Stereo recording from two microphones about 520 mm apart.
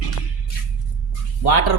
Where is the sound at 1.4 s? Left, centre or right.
Left.